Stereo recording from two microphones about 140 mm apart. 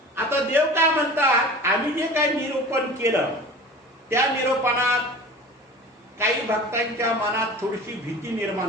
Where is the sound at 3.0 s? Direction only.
20° right (ahead or behind).